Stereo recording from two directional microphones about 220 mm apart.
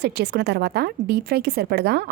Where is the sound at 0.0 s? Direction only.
45° right (ahead or behind).